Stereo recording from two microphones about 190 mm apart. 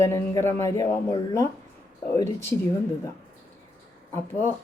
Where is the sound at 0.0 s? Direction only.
15° left (ahead or behind).